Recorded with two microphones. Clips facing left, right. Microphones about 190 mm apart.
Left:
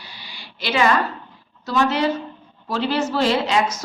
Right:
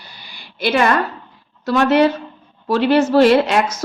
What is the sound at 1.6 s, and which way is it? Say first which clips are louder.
A woman's voice: right 6 dB; 60° right (ahead or behind).